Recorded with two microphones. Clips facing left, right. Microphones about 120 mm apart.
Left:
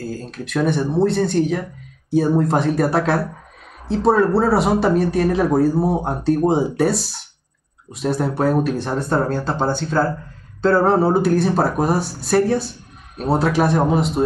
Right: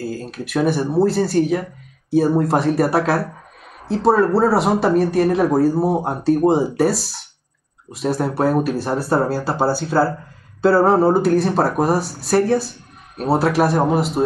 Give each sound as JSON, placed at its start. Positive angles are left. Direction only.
{"t": 0.0, "sound": "speech", "side_deg": -5}